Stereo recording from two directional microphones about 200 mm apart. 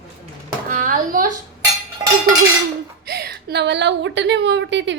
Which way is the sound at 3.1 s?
50° right (ahead or behind).